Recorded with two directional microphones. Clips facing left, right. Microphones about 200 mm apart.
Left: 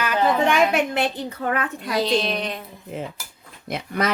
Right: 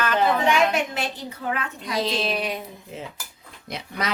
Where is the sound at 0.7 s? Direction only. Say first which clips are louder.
Left 5 dB; 60° left (ahead or behind).